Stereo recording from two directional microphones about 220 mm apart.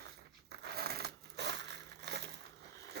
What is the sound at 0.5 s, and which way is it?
Crushing, 50° right (ahead or behind).